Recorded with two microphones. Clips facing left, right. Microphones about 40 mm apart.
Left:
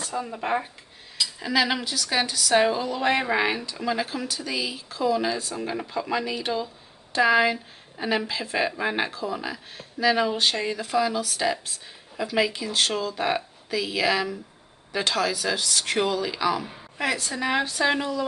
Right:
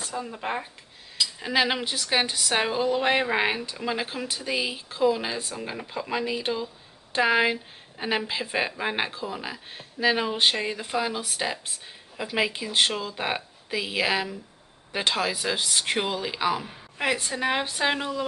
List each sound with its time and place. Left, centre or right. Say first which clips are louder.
0.1 s speech: left 4 dB; centre
1.4 s speech: left 1 dB; right
2.6 s a woman's voice: left 1 dB; centre